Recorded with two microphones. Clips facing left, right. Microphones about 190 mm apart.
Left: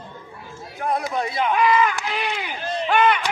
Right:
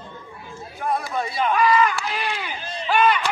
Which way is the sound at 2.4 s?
60° left (ahead or behind).